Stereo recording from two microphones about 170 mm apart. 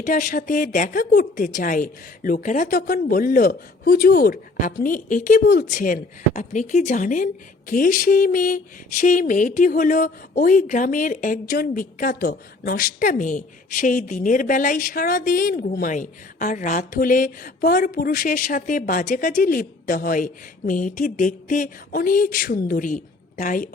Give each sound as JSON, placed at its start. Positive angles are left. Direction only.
{"t": 0.0, "sound": "speech", "side_deg": 50}